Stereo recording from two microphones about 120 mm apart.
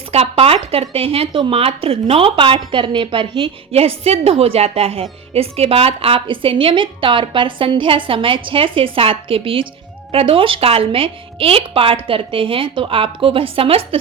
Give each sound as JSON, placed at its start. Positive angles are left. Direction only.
{"t": 0.1, "sound": "speech", "side_deg": -55}